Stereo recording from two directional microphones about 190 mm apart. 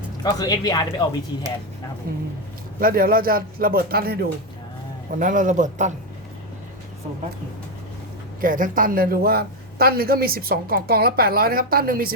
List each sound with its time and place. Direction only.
0.2 s speech: 20° left (ahead or behind)
2.8 s a man's voice: 50° right (ahead or behind)
5.1 s a man's voice: 45° right (ahead or behind)
8.4 s a man's voice: 45° right (ahead or behind)